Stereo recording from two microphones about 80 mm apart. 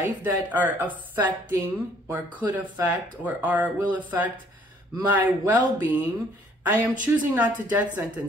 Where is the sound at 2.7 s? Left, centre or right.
Right.